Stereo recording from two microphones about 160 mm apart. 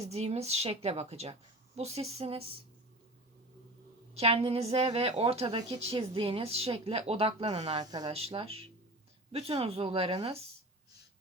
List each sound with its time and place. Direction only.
0.1 s a woman's voice: 40° right (ahead or behind)
4.1 s a woman's voice: 40° right (ahead or behind)
8.1 s a woman's voice: 35° right (ahead or behind)